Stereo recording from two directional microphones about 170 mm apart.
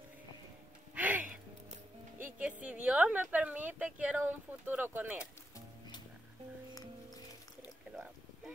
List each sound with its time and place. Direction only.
0.9 s music: 10° right (ahead or behind)
1.7 s music: 50° right (ahead or behind)
2.3 s a sound: 10° right (ahead or behind)